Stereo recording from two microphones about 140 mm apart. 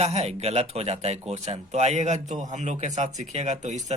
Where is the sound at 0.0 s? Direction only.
50° right (ahead or behind).